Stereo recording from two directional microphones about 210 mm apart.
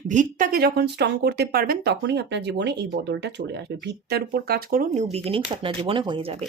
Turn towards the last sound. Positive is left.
turn(degrees=-25)  # may be behind; listen again after turning